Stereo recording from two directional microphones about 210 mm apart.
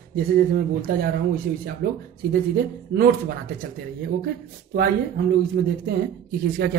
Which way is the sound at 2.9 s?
45° right (ahead or behind).